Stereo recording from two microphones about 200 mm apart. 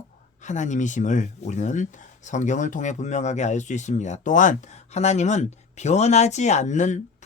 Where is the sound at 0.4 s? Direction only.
35° left (ahead or behind).